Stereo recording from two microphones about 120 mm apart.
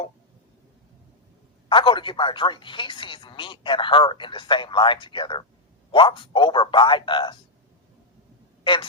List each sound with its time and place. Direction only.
1.7 s speech: 45° left (ahead or behind)
8.6 s speech: 45° left (ahead or behind)